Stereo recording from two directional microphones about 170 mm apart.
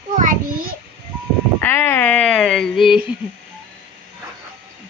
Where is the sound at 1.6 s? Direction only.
15° left (ahead or behind); by 3.1 s 5° right (ahead or behind).